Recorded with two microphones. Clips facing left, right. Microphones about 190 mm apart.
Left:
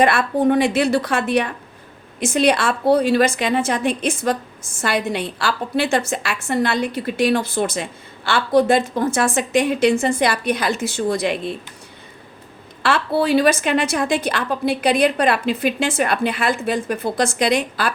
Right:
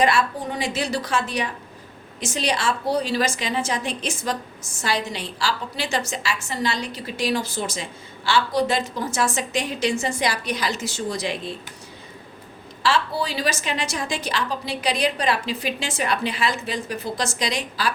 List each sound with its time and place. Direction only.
0.0 s a woman's voice: 55° left (ahead or behind)
12.8 s a woman's voice: 55° left (ahead or behind)